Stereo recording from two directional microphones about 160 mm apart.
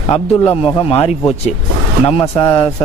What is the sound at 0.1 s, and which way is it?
Speech, 35° left (ahead or behind).